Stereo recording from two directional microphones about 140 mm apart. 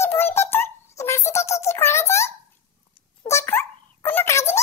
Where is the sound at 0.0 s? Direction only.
15° left (ahead or behind).